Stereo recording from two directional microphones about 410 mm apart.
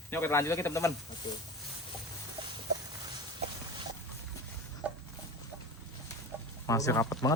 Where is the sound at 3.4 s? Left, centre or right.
Centre.